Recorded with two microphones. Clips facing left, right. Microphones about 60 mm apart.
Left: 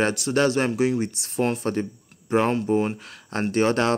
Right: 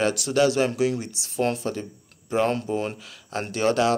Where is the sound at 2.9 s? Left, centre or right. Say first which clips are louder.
Left 2 dB; left.